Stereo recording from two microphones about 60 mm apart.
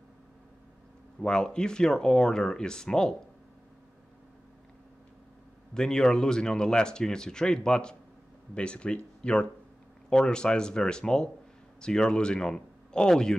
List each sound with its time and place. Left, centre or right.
1.2 s speech: centre
5.8 s speech: centre